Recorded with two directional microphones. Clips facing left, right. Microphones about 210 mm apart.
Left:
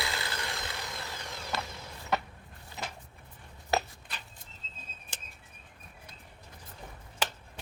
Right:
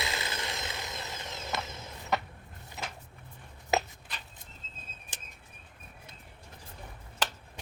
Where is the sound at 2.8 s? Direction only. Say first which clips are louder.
Even; centre (ahead or behind).